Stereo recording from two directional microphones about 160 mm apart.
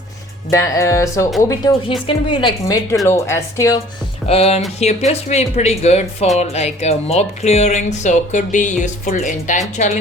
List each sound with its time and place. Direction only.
0.5 s a woman's voice: 20° left (ahead or behind)
4.3 s speech: 40° left (ahead or behind)